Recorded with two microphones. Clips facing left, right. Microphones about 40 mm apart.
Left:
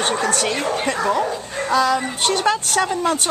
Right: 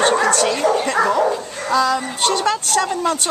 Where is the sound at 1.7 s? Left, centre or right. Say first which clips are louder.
Right 1 dB; centre.